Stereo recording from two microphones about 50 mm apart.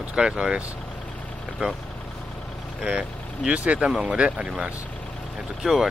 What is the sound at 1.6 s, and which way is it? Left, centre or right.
Speech, right.